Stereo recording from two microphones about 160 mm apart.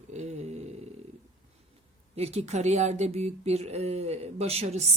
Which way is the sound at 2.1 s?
40° right (ahead or behind).